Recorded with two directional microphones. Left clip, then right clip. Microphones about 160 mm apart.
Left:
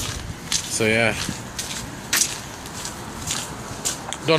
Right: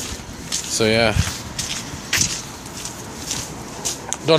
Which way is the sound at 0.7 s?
20° right (ahead or behind).